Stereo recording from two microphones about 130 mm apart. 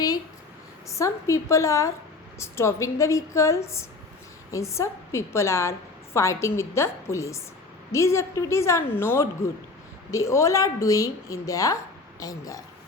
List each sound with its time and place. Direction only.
0.9 s a woman's voice: 25° left (ahead or behind)